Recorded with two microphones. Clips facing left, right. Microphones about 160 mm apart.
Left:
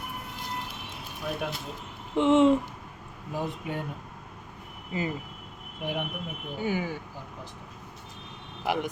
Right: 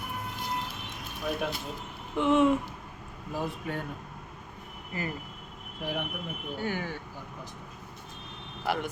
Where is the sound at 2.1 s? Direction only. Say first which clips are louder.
Left 3 dB; 25° left (ahead or behind).